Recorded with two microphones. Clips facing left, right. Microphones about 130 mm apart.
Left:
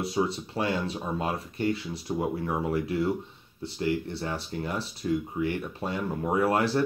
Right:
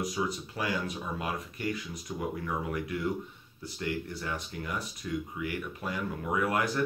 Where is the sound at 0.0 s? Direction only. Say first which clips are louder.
Left 4 dB; 30° left (ahead or behind).